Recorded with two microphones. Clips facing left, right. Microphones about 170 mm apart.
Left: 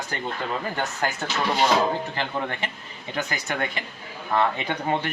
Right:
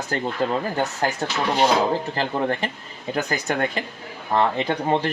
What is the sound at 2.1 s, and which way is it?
Speech, 35° right (ahead or behind).